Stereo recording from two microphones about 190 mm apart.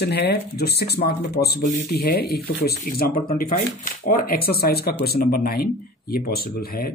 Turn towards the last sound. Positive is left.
turn(degrees=50)  # may be behind; listen again after turning